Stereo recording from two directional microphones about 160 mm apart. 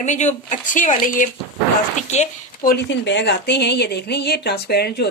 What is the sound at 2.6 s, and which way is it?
Speech, 80° left.